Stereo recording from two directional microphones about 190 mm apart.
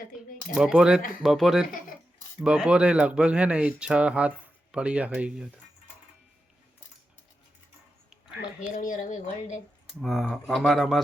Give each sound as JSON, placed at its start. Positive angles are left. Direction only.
{"t": 0.5, "sound": "speech", "side_deg": -5}
{"t": 8.6, "sound": "speech", "side_deg": 45}
{"t": 10.0, "sound": "speech", "side_deg": 0}